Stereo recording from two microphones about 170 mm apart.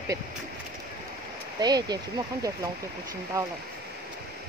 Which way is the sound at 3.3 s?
20° right (ahead or behind).